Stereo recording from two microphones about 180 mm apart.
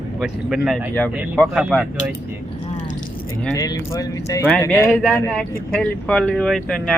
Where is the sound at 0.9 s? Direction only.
10° left (ahead or behind).